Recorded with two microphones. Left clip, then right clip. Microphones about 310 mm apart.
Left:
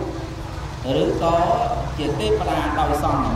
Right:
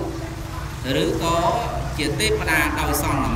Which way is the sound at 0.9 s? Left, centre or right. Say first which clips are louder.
Left 2 dB; centre.